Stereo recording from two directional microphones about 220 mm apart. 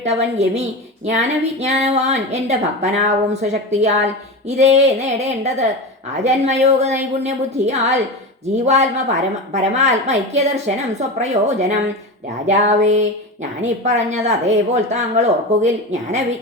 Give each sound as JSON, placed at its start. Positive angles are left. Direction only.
{"t": 0.0, "sound": "a woman's voice", "side_deg": -30}